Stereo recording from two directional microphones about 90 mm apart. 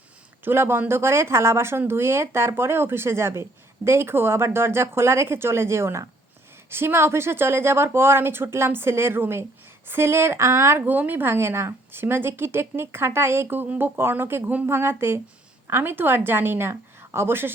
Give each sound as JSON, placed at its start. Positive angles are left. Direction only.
{"t": 0.4, "sound": "a woman's voice", "side_deg": -25}